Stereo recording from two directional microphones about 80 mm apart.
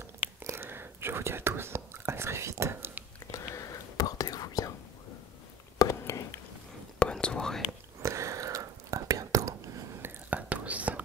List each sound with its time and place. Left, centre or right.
0.4 s whispering: right
3.3 s whispering: left
5.8 s a sound: left
7.0 s whispering: centre
8.0 s whispering: right
10.0 s whispering: centre